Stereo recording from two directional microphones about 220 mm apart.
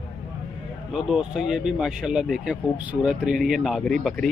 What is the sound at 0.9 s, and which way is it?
Speech, centre (ahead or behind).